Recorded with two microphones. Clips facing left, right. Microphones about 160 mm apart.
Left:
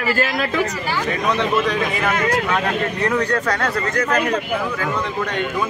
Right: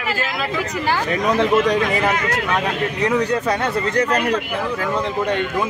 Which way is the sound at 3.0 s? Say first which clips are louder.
Right 2 dB; 15° right (ahead or behind).